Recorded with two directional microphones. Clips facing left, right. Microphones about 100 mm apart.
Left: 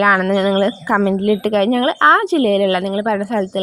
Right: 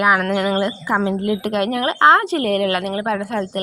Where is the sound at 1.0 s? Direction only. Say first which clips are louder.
Left 5 dB; 50° left (ahead or behind).